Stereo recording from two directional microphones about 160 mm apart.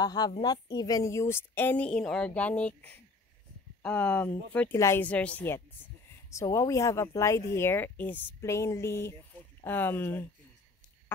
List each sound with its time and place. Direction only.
0.0 s a woman's voice: 25° left (ahead or behind)